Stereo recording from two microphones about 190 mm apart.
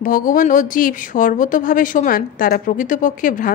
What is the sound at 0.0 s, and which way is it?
Speech, 45° left (ahead or behind).